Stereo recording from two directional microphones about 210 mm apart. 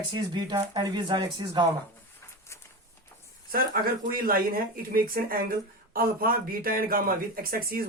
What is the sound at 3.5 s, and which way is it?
Speech, 45° right (ahead or behind).